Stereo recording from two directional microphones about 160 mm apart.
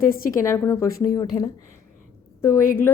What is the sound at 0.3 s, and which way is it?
Speech, 15° left (ahead or behind).